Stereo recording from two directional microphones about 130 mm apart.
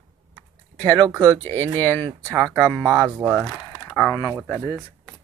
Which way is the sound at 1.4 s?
15° left (ahead or behind).